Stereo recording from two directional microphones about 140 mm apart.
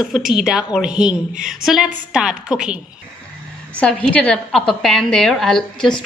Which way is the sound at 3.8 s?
10° left (ahead or behind).